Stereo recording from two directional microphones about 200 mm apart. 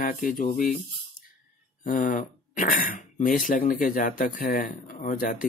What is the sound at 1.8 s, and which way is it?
Speech, 40° left (ahead or behind).